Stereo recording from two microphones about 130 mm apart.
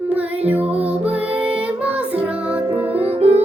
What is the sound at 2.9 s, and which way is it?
Music, 55° right (ahead or behind).